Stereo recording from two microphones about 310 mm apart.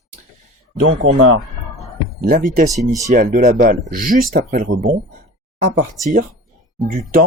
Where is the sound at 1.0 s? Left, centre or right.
Right.